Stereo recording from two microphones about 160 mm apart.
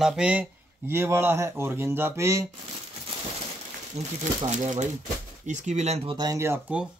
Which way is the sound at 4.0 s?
45° right (ahead or behind).